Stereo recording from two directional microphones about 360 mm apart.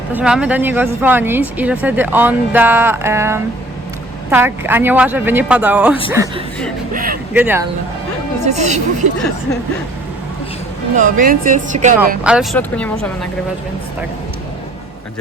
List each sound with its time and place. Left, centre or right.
0.1 s speech: centre
6.9 s speech: right
7.3 s speech: centre
8.4 s speech: centre
10.9 s speech: right
11.9 s speech: centre